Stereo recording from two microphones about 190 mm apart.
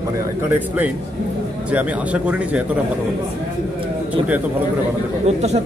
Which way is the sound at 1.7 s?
5° right (ahead or behind).